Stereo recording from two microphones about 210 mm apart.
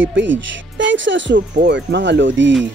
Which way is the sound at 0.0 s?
60° right (ahead or behind).